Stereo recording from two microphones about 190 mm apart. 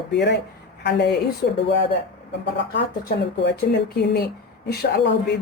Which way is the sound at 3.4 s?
60° left (ahead or behind).